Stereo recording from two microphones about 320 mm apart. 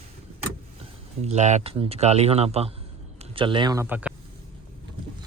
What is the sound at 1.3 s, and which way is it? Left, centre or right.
Speech, right.